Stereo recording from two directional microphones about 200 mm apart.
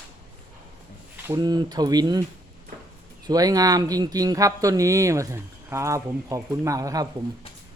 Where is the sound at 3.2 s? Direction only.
20° right (ahead or behind).